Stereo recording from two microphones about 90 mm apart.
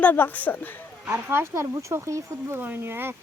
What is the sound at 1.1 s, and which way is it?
Speech, 25° right (ahead or behind).